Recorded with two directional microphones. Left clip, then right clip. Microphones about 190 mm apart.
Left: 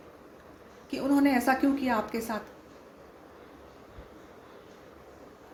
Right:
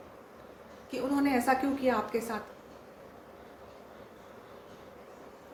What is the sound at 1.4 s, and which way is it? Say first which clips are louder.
Speech: left 1 dB; 45° left (ahead or behind).